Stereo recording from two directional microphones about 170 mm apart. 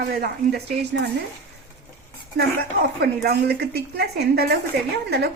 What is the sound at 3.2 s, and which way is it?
Speech, 70° right (ahead or behind).